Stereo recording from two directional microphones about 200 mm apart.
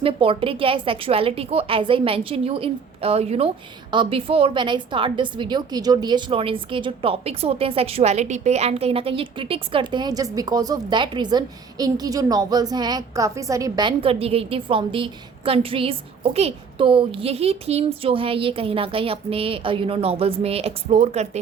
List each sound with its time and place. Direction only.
0.0 s a woman's voice: 25° right (ahead or behind)